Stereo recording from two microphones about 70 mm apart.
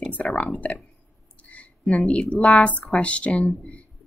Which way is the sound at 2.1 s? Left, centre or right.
Centre.